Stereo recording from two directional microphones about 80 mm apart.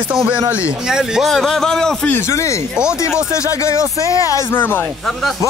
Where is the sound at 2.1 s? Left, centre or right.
Left.